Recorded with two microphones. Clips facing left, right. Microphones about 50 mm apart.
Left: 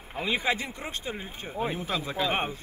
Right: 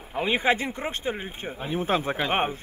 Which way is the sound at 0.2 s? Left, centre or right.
Right.